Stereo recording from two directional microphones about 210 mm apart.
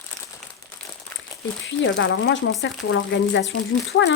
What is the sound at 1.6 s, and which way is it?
Speech, 60° left (ahead or behind).